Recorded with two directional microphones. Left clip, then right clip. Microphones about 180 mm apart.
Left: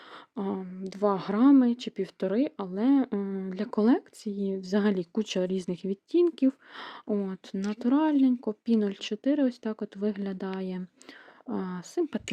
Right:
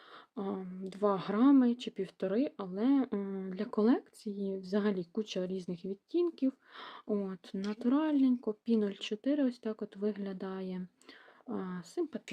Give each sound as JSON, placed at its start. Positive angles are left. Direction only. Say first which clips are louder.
{"t": 0.3, "sound": "speech", "louder": "left 5 dB", "side_deg": 30}